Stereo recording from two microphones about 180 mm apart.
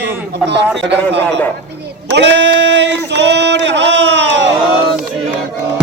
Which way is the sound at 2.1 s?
70° right (ahead or behind).